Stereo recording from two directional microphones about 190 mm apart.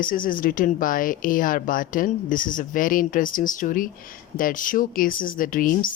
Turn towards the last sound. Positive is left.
turn(degrees=45)  # may be behind; listen again after turning